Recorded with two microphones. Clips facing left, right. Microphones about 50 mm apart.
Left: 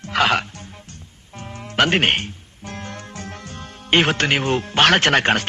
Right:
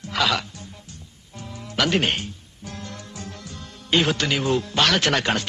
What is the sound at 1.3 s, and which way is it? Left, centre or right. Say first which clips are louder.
Music: left 5 dB; left.